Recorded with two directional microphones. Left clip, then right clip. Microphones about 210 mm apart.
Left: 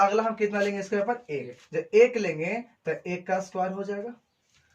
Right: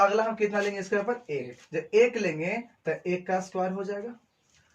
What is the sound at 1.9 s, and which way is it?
Speech, 15° right (ahead or behind).